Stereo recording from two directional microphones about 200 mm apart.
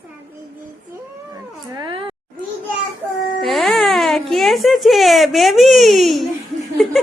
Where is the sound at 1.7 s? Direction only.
25° right (ahead or behind).